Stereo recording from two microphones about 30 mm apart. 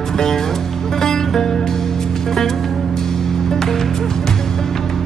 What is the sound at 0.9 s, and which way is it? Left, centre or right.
Music, centre.